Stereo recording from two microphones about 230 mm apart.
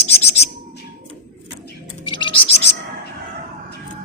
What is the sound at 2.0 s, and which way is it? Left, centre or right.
Music, left.